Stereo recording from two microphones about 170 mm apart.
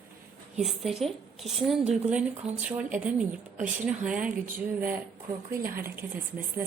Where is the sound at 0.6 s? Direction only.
Centre (ahead or behind).